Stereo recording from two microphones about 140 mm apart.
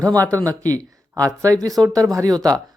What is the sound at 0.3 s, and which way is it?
Speech, 25° right (ahead or behind).